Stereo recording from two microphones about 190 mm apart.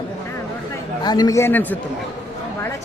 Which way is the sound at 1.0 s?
20° left (ahead or behind).